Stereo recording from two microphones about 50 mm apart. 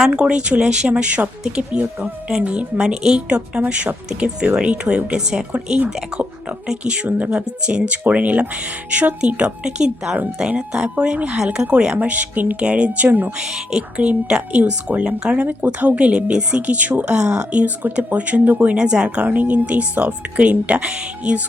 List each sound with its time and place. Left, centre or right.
0.1 s speech: centre
2.8 s a woman's voice: centre
3.2 s speech: right
11.9 s speech: right
12.5 s speech: right
13.1 s speech: right
13.9 s speech: right
15.4 s speech: right
18.8 s speech: centre
19.2 s speech: right